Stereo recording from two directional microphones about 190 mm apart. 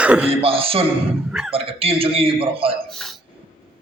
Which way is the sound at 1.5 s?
30° right (ahead or behind).